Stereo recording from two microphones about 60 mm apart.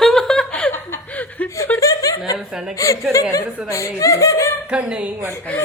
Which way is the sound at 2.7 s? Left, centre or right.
Left.